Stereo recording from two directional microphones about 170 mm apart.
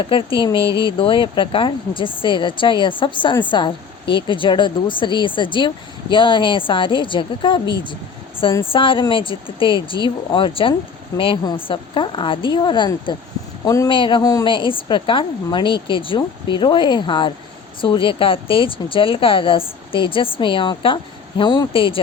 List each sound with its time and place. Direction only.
0.0 s speech: 30° left (ahead or behind)